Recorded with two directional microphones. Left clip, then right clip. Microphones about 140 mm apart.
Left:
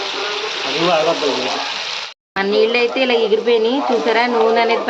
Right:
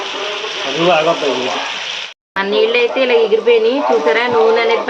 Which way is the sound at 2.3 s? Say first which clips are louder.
Right 2 dB; 70° left (ahead or behind).